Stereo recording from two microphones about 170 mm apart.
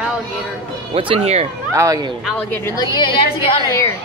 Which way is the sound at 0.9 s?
35° right (ahead or behind).